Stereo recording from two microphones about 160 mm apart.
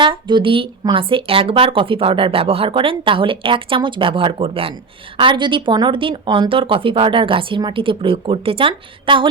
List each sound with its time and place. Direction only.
0.0 s a woman's voice: 30° right (ahead or behind)